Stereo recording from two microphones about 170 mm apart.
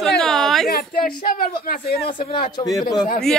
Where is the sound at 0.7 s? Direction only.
60° left (ahead or behind).